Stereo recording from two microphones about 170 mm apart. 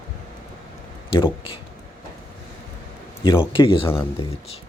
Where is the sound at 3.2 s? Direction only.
30° left (ahead or behind).